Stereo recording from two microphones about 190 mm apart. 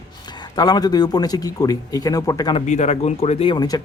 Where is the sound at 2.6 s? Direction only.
35° left (ahead or behind).